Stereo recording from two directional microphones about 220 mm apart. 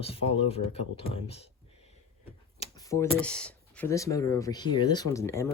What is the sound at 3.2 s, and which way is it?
Speech, 5° left (ahead or behind).